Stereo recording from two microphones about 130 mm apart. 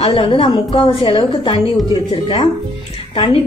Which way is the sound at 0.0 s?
45° left (ahead or behind).